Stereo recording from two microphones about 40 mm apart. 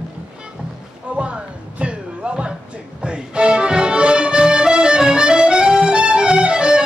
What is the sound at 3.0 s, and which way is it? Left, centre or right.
Music, right.